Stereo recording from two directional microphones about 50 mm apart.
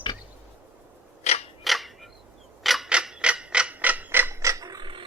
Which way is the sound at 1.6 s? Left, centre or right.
Centre.